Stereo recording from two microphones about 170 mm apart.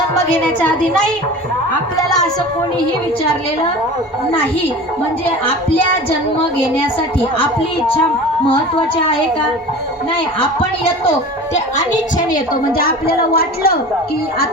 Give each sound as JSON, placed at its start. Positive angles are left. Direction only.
{"t": 0.1, "sound": "a woman's voice", "side_deg": 10}
{"t": 12.1, "sound": "a woman's voice", "side_deg": 55}